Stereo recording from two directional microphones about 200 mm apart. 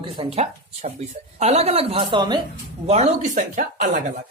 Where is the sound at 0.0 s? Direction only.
30° right (ahead or behind).